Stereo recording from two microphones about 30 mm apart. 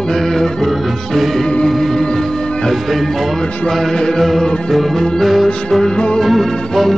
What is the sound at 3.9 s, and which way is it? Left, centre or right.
Music, left.